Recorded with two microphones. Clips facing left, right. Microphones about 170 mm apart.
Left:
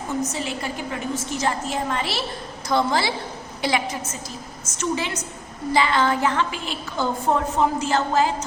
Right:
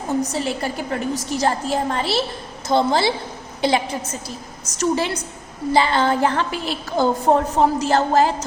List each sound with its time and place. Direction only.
0.1 s a woman's voice: 35° right (ahead or behind)